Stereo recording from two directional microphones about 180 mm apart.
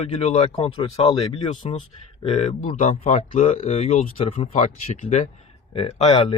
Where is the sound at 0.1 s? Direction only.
35° left (ahead or behind).